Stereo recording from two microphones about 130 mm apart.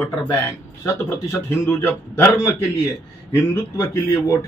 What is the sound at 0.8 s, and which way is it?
A man's voice, 20° left (ahead or behind).